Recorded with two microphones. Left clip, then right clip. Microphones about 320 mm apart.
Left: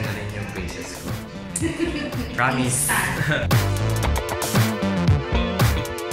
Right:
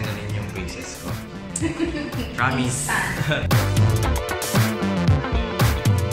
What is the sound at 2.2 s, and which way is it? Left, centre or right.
Music, centre.